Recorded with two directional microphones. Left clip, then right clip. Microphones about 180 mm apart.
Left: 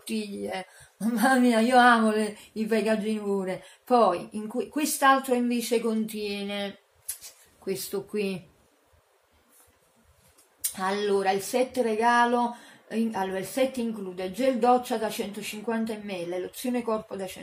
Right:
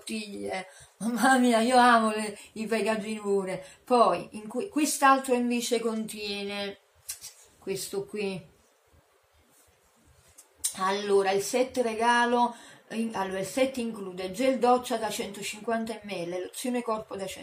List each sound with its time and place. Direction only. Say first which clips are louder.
0.0 s speech: left 2 dB; 10° left (ahead or behind)
10.6 s speech: left 1 dB; 15° left (ahead or behind)